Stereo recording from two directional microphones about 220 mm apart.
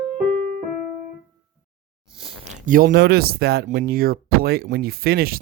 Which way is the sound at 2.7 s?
40° right (ahead or behind).